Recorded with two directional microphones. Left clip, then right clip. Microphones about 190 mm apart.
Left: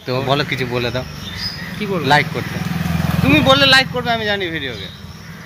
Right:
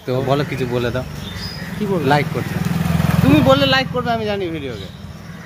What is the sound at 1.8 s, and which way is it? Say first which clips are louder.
Speech: right 1 dB; 20° right (ahead or behind).